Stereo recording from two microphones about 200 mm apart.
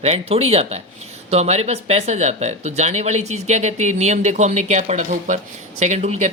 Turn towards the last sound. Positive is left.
turn(degrees=-35)  # may be behind; listen again after turning